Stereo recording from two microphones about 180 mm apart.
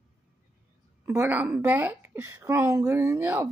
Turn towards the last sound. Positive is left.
turn(degrees=-10)  # may be behind; listen again after turning